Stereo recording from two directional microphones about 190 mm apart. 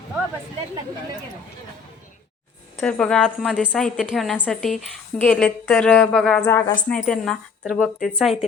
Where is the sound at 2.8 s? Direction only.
5° left (ahead or behind).